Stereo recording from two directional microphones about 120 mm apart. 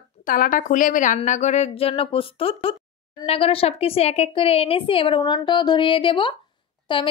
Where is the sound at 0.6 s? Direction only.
90° left.